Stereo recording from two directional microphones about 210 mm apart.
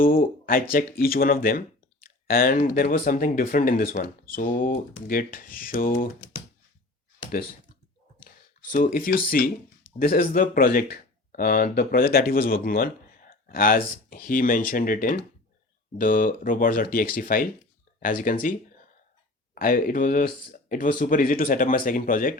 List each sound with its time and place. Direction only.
0.0 s a sound: 45° left (ahead or behind)
0.7 s speech: 45° left (ahead or behind)
8.7 s speech: 40° left (ahead or behind)
19.5 s speech: 40° left (ahead or behind)